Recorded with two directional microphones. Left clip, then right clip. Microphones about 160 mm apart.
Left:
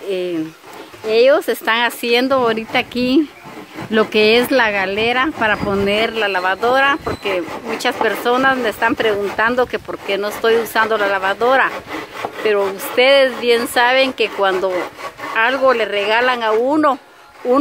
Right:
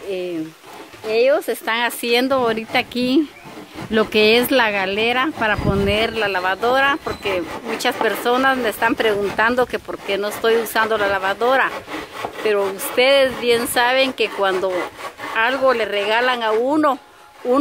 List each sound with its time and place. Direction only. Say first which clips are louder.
1.0 s speech: left 4 dB; 25° left (ahead or behind)
1.7 s speech: left 3 dB; 5° left (ahead or behind)